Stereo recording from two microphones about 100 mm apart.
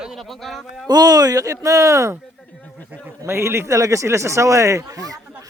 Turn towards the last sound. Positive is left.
turn(degrees=-35)  # may be behind; listen again after turning